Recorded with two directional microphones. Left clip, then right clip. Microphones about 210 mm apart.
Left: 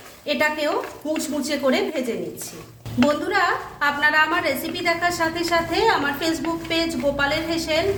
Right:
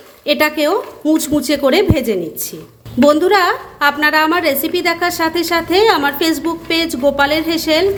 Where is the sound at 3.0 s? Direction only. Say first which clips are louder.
Right 9 dB; 50° right (ahead or behind).